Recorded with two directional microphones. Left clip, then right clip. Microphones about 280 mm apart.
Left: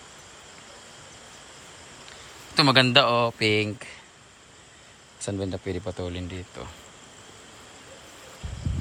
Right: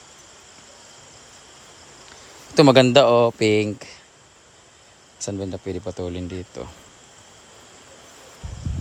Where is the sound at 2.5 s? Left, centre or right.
Right.